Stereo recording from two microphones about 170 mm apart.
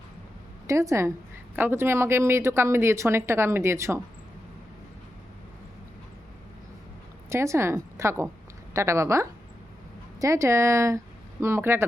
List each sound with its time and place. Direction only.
0.7 s speech: 20° right (ahead or behind)
7.3 s a woman's voice: 15° right (ahead or behind)